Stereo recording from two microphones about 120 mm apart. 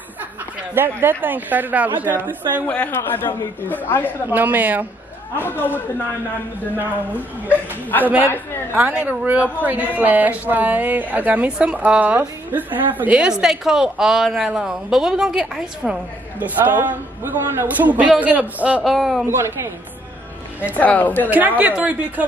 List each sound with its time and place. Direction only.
0.7 s a woman's voice: 20° right (ahead or behind)
2.6 s speech: 15° left (ahead or behind)
4.3 s a woman's voice: 15° right (ahead or behind)
5.3 s speech: 15° left (ahead or behind)
6.8 s a woman's voice: 15° right (ahead or behind)
18.9 s speech: centre (ahead or behind)
19.2 s a woman's voice: 20° right (ahead or behind)
20.7 s speech: 15° left (ahead or behind)
21.3 s a woman's voice: 15° right (ahead or behind)